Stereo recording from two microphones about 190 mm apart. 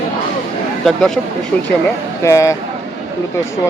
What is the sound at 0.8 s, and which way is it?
Speech, 5° left (ahead or behind).